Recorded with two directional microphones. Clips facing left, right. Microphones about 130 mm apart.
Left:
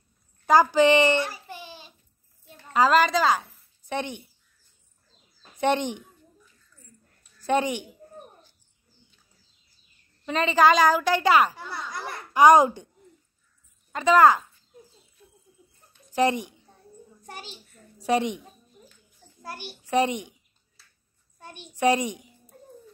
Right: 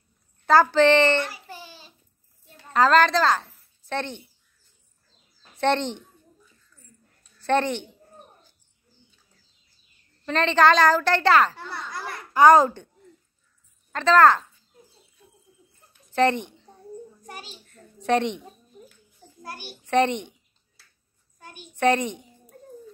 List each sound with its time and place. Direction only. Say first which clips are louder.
0.5 s a child's voice: right 1 dB; 15° left (ahead or behind)
1.5 s a sound: left 1 dB; 15° left (ahead or behind)
2.7 s a child's voice: right 2 dB; 10° left (ahead or behind)
5.6 s a child's voice: right 1 dB; 10° left (ahead or behind)
7.4 s a child's voice: right 1 dB; 10° left (ahead or behind)
10.2 s a child's voice: right 1 dB; 5° left (ahead or behind)
13.9 s a child's voice: right 1 dB; 10° left (ahead or behind)
16.1 s a woman's voice: right 2 dB; 10° left (ahead or behind)
17.9 s a woman's voice: right 1 dB; 10° left (ahead or behind)
19.8 s a sound: right 2 dB; 10° left (ahead or behind)
21.7 s a child's voice: right 1 dB; 10° left (ahead or behind)